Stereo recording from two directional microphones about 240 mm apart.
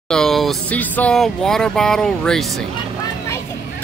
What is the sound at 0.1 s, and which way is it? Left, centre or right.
Speech, centre.